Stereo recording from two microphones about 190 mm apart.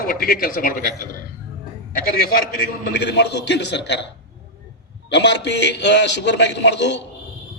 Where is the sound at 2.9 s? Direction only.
65° left (ahead or behind).